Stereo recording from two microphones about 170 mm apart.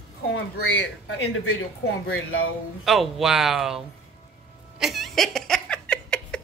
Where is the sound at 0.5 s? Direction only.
90° left.